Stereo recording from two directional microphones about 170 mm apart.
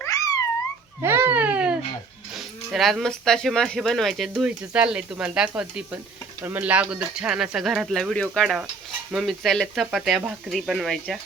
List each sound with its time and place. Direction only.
0.0 s a sound: 20° left (ahead or behind)
1.0 s baby cry: 15° right (ahead or behind)
2.3 s speech: centre (ahead or behind)